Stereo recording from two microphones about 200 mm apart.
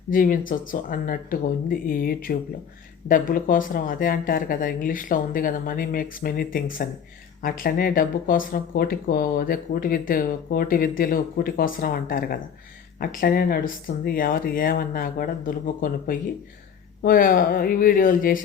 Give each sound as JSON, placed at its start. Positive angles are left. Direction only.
{"t": 0.1, "sound": "speech", "side_deg": 45}